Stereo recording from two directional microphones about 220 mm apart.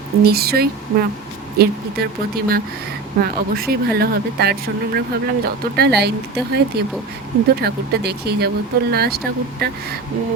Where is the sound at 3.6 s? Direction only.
45° right (ahead or behind).